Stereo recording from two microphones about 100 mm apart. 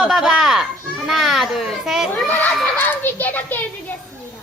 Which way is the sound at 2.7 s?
20° left (ahead or behind).